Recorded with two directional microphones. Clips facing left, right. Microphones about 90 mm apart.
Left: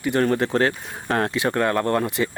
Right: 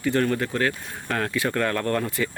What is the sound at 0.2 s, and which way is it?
Speech, 30° left (ahead or behind).